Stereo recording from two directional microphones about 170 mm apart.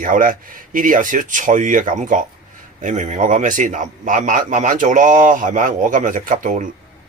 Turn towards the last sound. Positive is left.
turn(degrees=-50)  # may be behind; listen again after turning